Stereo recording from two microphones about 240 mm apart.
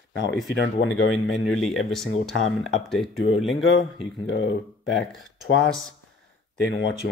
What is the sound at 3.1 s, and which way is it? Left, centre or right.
Speech, left.